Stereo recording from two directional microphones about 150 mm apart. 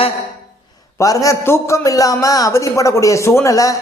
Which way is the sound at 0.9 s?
20° left (ahead or behind).